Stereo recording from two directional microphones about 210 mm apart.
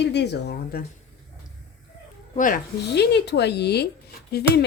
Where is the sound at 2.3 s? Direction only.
40° left (ahead or behind).